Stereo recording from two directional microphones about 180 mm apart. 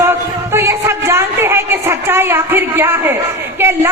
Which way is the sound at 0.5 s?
15° right (ahead or behind).